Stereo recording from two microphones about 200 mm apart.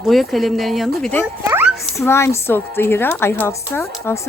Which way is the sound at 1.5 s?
10° right (ahead or behind).